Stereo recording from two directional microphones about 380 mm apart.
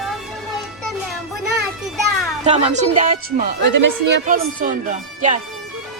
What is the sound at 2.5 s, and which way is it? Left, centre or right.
Speech, centre.